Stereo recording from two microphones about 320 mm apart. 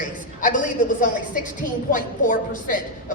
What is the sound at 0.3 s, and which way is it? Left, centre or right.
A woman's voice, left.